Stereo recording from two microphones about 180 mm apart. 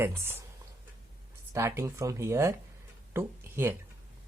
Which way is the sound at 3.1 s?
15° right (ahead or behind).